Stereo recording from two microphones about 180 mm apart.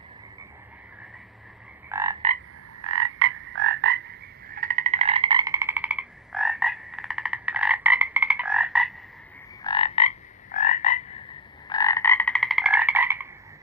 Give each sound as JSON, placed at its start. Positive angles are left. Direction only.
{"t": 1.9, "sound": "frog", "side_deg": -15}
{"t": 3.2, "sound": "frog", "side_deg": -90}
{"t": 4.4, "sound": "frog", "side_deg": -50}
{"t": 9.6, "sound": "frog", "side_deg": 30}
{"t": 10.5, "sound": "frog", "side_deg": 45}
{"t": 11.7, "sound": "frog", "side_deg": 20}